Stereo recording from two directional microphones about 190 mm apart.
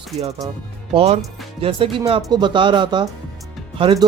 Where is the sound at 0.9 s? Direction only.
30° right (ahead or behind).